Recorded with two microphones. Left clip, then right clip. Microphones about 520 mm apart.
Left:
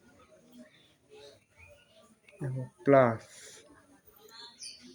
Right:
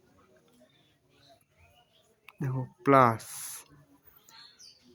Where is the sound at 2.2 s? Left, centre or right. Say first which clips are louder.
Right 3 dB; right.